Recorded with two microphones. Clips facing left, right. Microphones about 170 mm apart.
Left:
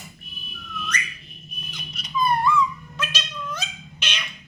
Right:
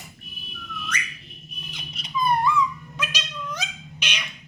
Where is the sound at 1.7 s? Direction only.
25° right (ahead or behind).